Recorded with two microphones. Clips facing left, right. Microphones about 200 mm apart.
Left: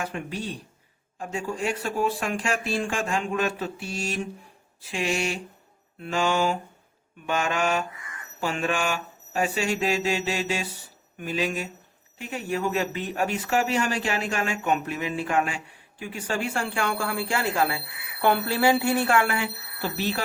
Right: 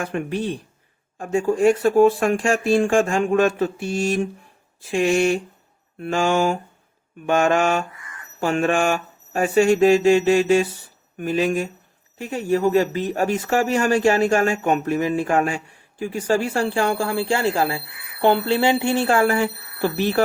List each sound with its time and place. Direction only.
0.0 s speech: 55° right (ahead or behind)